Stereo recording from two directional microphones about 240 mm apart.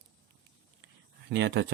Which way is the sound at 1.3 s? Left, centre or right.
Right.